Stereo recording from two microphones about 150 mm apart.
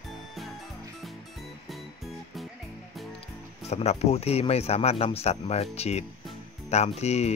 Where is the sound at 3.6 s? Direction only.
45° left (ahead or behind).